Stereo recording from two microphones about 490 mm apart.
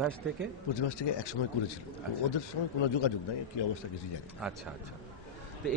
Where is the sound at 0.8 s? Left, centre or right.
Left.